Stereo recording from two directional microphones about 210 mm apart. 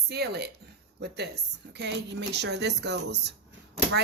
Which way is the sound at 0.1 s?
50° right (ahead or behind).